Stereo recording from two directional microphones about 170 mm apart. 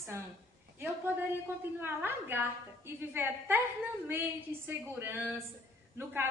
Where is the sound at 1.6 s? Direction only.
10° right (ahead or behind).